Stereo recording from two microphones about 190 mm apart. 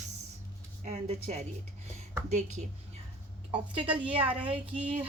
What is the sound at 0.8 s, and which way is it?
Speech, 35° right (ahead or behind).